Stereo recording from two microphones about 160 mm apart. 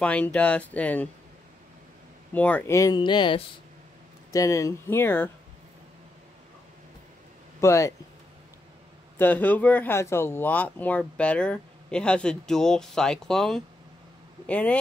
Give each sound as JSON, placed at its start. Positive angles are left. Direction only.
{"t": 0.0, "sound": "speech", "side_deg": 5}
{"t": 2.3, "sound": "speech", "side_deg": 10}
{"t": 7.6, "sound": "speech", "side_deg": 20}
{"t": 9.2, "sound": "speech", "side_deg": 10}